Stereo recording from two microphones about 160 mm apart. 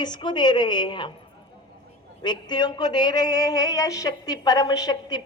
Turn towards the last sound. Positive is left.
turn(degrees=25)  # may be behind; listen again after turning